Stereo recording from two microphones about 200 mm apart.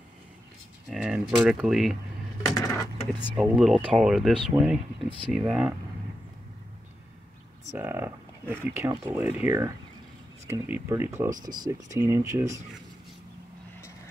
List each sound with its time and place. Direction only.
0.8 s speech: 5° right (ahead or behind)
2.5 s a sound: 20° left (ahead or behind)
3.2 s speech: centre (ahead or behind)
7.7 s speech: 10° right (ahead or behind)